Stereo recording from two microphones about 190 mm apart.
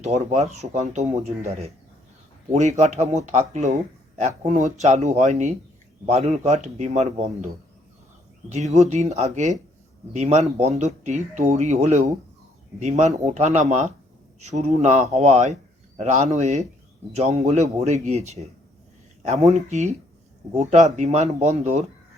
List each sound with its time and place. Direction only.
0.3 s speech: 35° right (ahead or behind)
2.5 s speech: 35° right (ahead or behind)
8.4 s speech: 35° right (ahead or behind)